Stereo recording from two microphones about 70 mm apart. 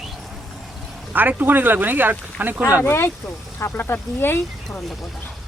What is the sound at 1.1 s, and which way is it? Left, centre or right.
Speech, right.